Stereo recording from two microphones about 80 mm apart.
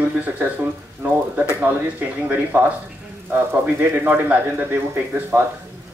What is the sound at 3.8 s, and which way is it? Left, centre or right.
Speech, centre.